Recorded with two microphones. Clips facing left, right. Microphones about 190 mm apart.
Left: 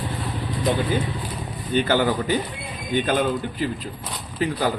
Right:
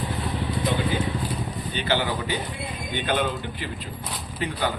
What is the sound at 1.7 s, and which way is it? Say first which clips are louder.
A man's voice: left 6 dB; 45° left (ahead or behind).